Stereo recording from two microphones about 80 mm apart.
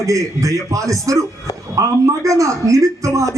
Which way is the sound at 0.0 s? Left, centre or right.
Right.